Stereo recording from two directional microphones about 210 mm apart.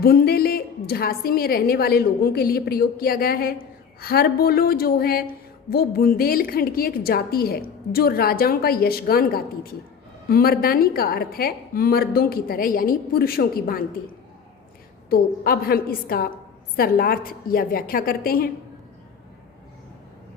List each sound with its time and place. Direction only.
0.0 s a woman's voice: 45° left (ahead or behind)
15.1 s a woman's voice: 45° left (ahead or behind)